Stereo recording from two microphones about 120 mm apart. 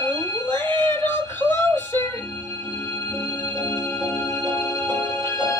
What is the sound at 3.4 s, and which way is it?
Music, 25° left (ahead or behind).